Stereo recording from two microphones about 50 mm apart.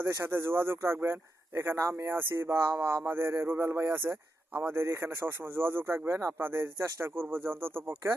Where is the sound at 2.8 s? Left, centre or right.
Right.